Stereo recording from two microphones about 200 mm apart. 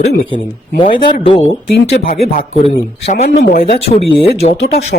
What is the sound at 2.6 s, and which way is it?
Speech, 30° left (ahead or behind).